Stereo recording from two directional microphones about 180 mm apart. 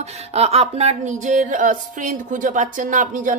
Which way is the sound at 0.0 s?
35° right (ahead or behind).